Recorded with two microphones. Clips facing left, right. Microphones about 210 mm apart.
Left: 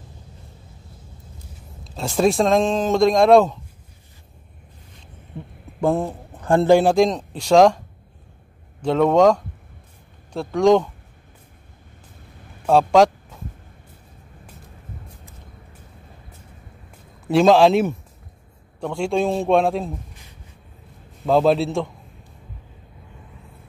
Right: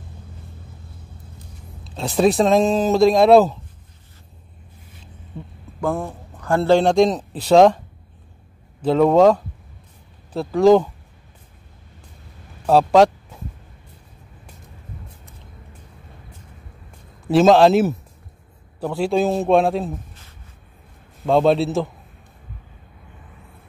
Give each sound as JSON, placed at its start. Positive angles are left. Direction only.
{"t": 1.9, "sound": "speech", "side_deg": 0}
{"t": 5.8, "sound": "a man's voice", "side_deg": 20}
{"t": 6.8, "sound": "speech", "side_deg": 0}
{"t": 8.8, "sound": "speech", "side_deg": -5}
{"t": 12.6, "sound": "speech", "side_deg": 0}
{"t": 17.3, "sound": "speech", "side_deg": 0}
{"t": 21.3, "sound": "speech", "side_deg": 0}